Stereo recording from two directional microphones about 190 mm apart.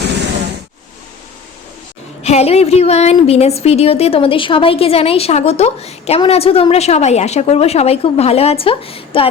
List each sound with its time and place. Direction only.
2.2 s a woman's voice: 35° left (ahead or behind)